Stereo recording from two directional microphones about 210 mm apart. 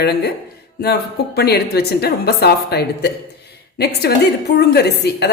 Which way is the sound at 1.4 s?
50° left (ahead or behind).